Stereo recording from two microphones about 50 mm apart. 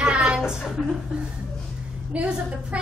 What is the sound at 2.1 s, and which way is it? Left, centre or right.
Speech, right.